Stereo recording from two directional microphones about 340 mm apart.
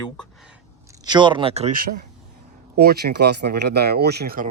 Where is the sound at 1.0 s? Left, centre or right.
Centre.